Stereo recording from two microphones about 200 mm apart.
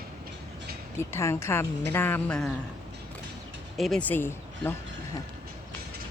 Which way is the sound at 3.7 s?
Centre (ahead or behind).